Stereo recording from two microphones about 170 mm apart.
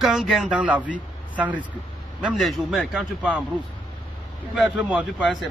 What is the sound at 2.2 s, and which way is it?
A man's voice, 5° right (ahead or behind).